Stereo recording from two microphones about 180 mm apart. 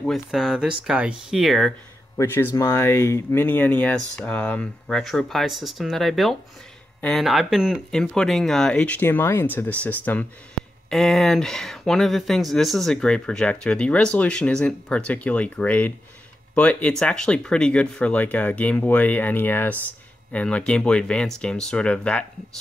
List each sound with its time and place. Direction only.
0.0 s speech: centre (ahead or behind)
2.1 s speech: 10° left (ahead or behind)